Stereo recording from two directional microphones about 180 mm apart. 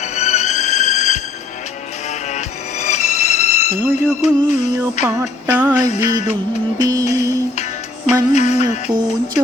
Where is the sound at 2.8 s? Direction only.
40° left (ahead or behind).